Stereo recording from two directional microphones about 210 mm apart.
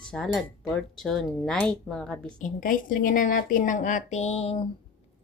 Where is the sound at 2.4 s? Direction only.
40° left (ahead or behind).